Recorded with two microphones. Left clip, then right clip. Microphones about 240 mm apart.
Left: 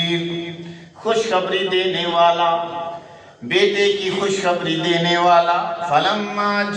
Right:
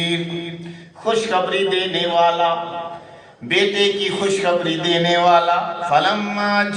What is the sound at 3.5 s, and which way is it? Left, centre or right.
A man's voice, right.